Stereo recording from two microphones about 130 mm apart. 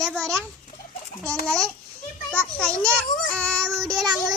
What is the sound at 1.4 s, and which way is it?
A child's voice, 5° left (ahead or behind).